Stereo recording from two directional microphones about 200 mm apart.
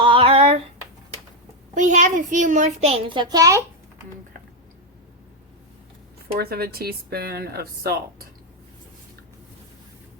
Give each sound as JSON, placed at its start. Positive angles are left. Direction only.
{"t": 0.0, "sound": "female singing", "side_deg": -25}
{"t": 1.7, "sound": "a child's voice", "side_deg": -40}
{"t": 6.2, "sound": "speech", "side_deg": -50}